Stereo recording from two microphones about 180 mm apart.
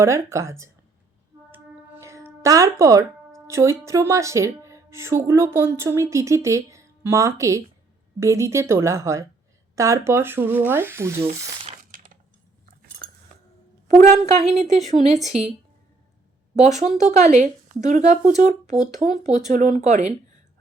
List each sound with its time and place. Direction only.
0.0 s speech: 15° right (ahead or behind)
1.5 s a sound: 15° right (ahead or behind)
3.4 s speech: 15° right (ahead or behind)
11.8 s crushing: 50° right (ahead or behind)
13.0 s cutlery: 55° right (ahead or behind)
13.8 s speech: 40° right (ahead or behind)
16.6 s speech: 40° right (ahead or behind)